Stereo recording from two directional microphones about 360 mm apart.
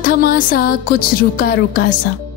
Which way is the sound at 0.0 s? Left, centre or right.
Left.